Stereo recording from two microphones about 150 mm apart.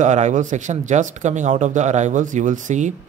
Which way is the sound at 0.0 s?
55° right (ahead or behind).